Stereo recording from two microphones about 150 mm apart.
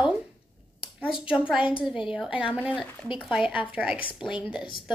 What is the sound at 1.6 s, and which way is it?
Speech, 35° left (ahead or behind).